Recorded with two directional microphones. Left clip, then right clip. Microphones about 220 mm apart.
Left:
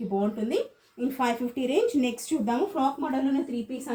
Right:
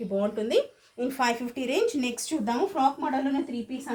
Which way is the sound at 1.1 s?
40° right (ahead or behind).